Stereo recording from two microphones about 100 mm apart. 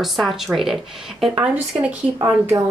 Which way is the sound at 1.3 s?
15° right (ahead or behind).